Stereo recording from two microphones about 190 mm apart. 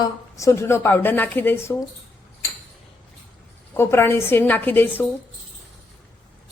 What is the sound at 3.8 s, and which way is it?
Speech, 10° left (ahead or behind).